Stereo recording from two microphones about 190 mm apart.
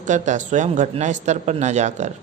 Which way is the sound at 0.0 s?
40° right (ahead or behind).